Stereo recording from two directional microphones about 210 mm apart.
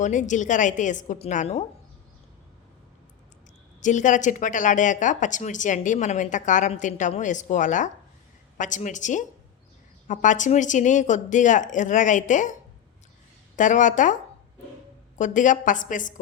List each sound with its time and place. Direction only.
0.0 s speech: 35° left (ahead or behind)
3.8 s speech: 35° left (ahead or behind)
13.6 s speech: 35° left (ahead or behind)
15.2 s speech: 35° left (ahead or behind)